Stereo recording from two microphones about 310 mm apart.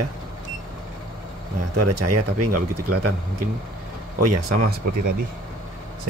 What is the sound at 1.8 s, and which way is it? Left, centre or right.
Speech, right.